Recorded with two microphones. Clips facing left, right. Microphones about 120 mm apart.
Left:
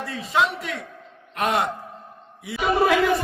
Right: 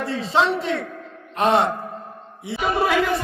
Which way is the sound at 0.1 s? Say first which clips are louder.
Right 3 dB; 30° right (ahead or behind).